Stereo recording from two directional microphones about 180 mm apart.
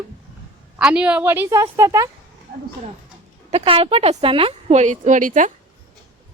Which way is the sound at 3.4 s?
30° right (ahead or behind).